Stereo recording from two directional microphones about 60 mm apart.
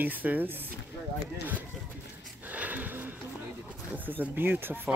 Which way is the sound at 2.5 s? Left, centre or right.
Right.